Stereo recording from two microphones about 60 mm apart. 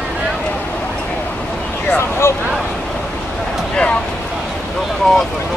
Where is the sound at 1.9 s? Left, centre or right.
Left.